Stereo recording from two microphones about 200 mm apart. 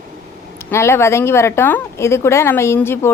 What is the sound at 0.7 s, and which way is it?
A woman's voice, 15° left (ahead or behind).